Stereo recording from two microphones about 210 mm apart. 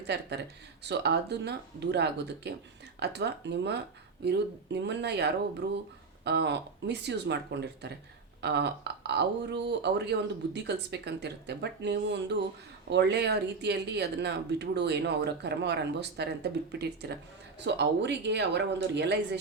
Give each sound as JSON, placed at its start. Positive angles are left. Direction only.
{"t": 0.0, "sound": "speech", "side_deg": -55}